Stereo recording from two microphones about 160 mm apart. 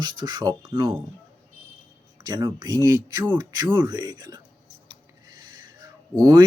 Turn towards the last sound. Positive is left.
turn(degrees=-25)  # may be behind; listen again after turning